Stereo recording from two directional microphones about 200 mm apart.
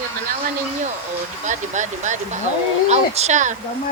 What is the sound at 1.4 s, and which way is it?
Speech, 40° right (ahead or behind).